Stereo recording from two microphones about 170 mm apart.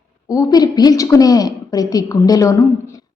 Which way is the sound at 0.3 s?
20° left (ahead or behind).